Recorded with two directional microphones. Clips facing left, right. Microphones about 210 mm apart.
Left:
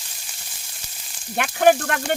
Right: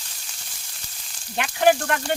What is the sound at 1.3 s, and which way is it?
Speech, 55° left (ahead or behind).